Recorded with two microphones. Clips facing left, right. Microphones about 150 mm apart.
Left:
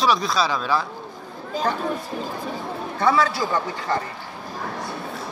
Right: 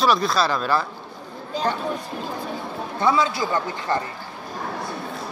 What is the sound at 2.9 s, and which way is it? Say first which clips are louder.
Speech: left 1 dB; 20° right (ahead or behind).